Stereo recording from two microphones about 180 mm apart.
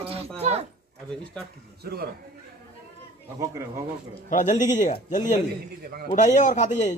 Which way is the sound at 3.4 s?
15° right (ahead or behind).